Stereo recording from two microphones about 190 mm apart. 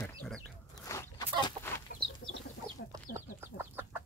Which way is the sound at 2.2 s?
45° left (ahead or behind).